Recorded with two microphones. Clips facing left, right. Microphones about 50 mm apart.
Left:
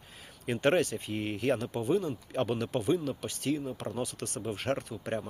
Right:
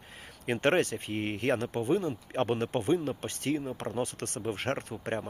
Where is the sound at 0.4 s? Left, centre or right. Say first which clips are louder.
Even; right.